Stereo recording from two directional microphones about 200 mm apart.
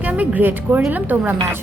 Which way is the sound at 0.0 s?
5° right (ahead or behind).